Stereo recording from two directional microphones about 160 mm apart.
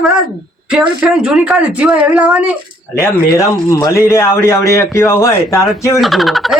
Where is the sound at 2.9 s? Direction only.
15° left (ahead or behind).